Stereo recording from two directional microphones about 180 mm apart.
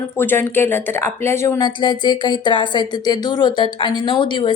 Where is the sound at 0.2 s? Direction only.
10° left (ahead or behind).